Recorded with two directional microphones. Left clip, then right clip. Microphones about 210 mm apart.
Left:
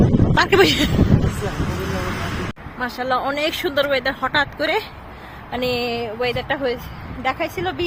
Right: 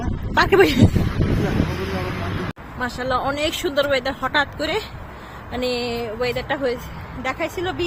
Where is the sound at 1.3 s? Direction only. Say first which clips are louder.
Right 2 dB; 30° left (ahead or behind).